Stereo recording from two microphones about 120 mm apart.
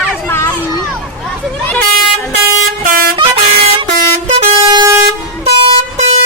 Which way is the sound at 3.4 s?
60° right (ahead or behind).